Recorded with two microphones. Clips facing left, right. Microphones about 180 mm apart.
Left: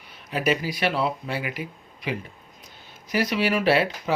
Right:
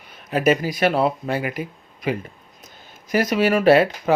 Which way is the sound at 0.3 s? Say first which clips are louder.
Right 6 dB; 45° right (ahead or behind).